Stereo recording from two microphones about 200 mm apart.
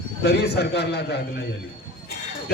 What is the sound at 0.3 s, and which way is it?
A man's voice, 55° left (ahead or behind).